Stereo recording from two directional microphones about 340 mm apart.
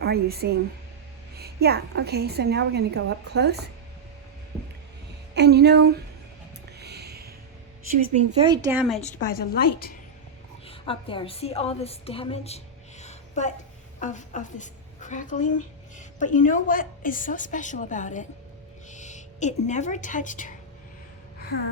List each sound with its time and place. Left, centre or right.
0.0 s a woman's voice: right
5.3 s a woman's voice: right
6.7 s a sound: right
7.9 s speech: centre
9.0 s a woman's voice: left
10.7 s a woman's voice: centre
21.3 s gasp: left